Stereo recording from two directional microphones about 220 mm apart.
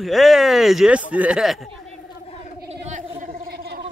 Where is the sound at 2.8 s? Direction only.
30° right (ahead or behind).